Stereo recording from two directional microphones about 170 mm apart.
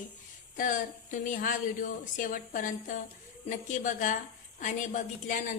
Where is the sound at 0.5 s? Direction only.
50° left (ahead or behind).